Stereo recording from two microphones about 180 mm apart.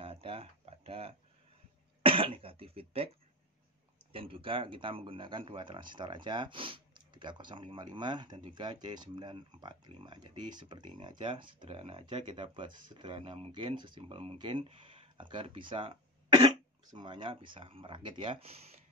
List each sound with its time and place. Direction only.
0.0 s a sound: 30° right (ahead or behind)
2.0 s cough: 30° right (ahead or behind)
4.1 s speech: 30° right (ahead or behind)